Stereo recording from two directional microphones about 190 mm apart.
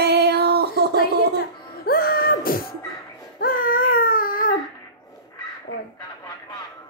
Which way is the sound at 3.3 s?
50° left (ahead or behind).